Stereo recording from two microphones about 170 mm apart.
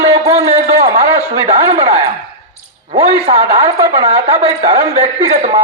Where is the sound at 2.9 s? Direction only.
35° right (ahead or behind).